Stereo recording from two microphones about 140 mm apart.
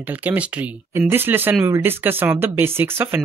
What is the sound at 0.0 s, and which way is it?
Speech, 10° right (ahead or behind).